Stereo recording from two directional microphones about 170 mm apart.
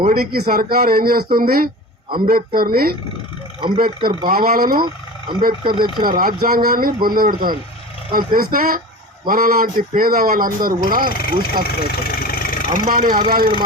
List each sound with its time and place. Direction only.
0.0 s speech: 60° right (ahead or behind)
11.1 s speech: 60° left (ahead or behind)
11.6 s vehicle: 65° left (ahead or behind)
12.8 s speech: 55° right (ahead or behind)